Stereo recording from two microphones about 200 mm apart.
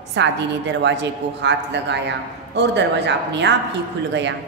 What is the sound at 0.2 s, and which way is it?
A woman's voice, 60° right (ahead or behind).